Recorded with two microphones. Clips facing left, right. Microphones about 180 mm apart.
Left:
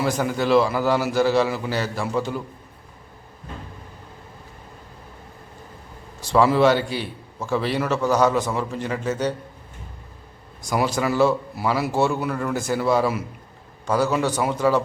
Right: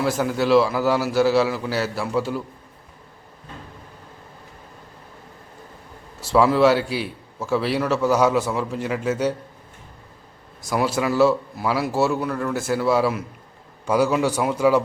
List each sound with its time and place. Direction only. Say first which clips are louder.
0.0 s a man's voice: right 1 dB; centre (ahead or behind)
6.1 s a man's voice: even; 5° right (ahead or behind)
10.6 s a man's voice: even; 5° right (ahead or behind)